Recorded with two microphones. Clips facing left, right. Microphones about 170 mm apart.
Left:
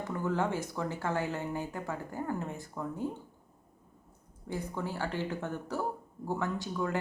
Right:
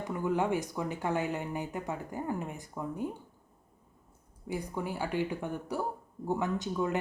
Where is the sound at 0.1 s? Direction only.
15° right (ahead or behind).